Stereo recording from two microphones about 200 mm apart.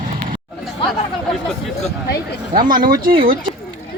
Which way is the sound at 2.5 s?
45° right (ahead or behind).